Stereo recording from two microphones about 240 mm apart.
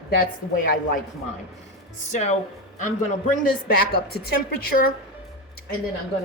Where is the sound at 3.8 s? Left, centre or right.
Left.